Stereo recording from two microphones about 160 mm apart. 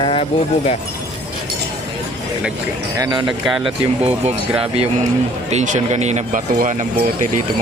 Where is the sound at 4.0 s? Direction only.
45° right (ahead or behind).